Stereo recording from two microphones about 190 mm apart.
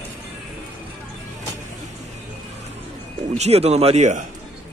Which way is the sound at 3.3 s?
35° right (ahead or behind).